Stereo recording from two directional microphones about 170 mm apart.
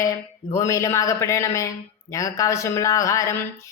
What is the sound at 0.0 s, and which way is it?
Speech, 20° left (ahead or behind).